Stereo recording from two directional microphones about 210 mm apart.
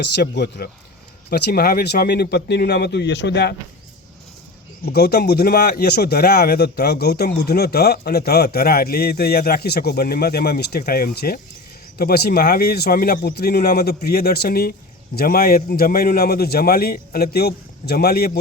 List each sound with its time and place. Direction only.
0.2 s speech: 50° left (ahead or behind)
4.9 s speech: 50° left (ahead or behind)